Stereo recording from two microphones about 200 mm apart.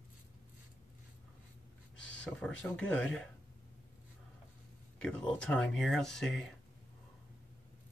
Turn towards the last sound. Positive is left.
turn(degrees=0)  # may be behind; listen again after turning